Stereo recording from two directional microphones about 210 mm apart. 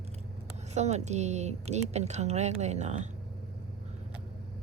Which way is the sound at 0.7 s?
30° right (ahead or behind).